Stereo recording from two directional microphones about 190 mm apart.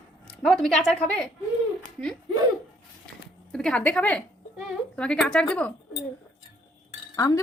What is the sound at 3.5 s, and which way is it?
A woman's voice, 5° left (ahead or behind).